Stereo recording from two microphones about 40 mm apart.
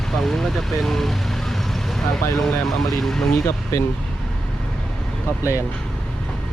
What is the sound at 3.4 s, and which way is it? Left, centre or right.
Speech, left.